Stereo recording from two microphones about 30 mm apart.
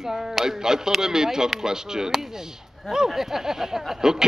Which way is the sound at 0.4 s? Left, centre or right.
Centre.